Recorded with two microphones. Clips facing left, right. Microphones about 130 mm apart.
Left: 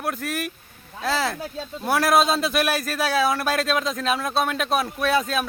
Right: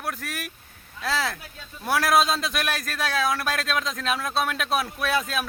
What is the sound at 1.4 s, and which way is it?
Speech, 30° left (ahead or behind).